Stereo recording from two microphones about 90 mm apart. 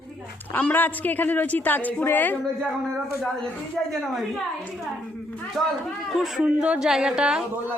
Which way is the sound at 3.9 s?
Centre (ahead or behind).